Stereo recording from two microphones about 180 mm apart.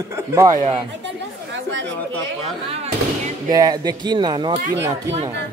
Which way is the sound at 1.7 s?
90° right.